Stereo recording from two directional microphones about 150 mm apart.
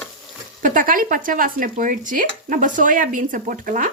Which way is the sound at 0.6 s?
60° right (ahead or behind).